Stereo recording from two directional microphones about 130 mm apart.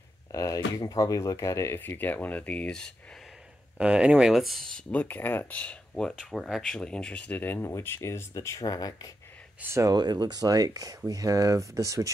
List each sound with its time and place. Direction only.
0.3 s speech: 25° left (ahead or behind); by 2.9 s 10° left (ahead or behind)
3.7 s speech: 10° right (ahead or behind); by 9.1 s 30° left (ahead or behind)
9.6 s speech: 20° right (ahead or behind)
9.9 s speech: 35° right (ahead or behind)